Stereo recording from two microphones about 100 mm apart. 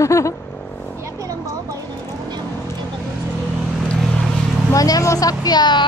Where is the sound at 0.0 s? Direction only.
30° left (ahead or behind).